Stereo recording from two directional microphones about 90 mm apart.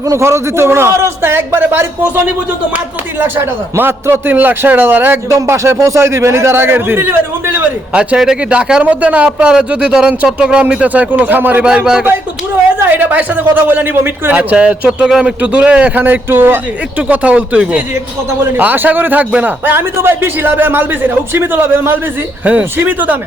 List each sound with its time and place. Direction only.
0.1 s a man's voice: 30° right (ahead or behind)
7.9 s a man's voice: 10° right (ahead or behind)
12.8 s a man's voice: 20° right (ahead or behind)